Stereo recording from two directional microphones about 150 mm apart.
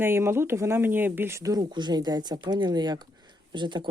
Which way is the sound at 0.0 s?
15° right (ahead or behind).